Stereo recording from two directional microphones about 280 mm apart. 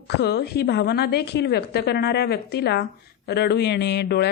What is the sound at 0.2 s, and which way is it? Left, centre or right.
Speech, left.